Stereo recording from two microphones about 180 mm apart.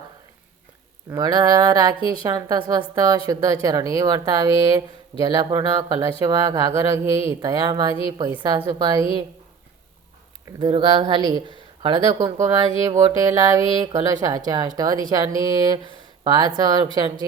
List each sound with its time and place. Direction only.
1.1 s speech: 20° right (ahead or behind)
10.6 s speech: 25° right (ahead or behind)